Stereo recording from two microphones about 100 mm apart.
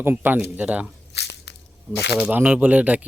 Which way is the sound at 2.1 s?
15° right (ahead or behind).